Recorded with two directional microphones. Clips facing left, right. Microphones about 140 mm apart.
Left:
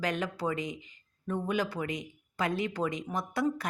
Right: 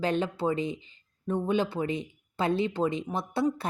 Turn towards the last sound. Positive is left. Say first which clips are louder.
# right 3 dB
turn(degrees=-25)  # may be behind; listen again after turning